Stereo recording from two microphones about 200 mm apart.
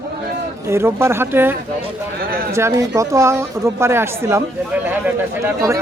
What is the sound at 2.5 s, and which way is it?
Speech, 15° right (ahead or behind).